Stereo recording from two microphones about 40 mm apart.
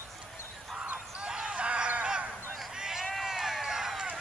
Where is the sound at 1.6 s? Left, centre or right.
Right.